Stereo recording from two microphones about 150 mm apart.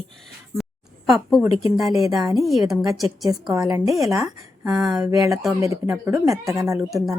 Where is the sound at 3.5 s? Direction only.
25° right (ahead or behind).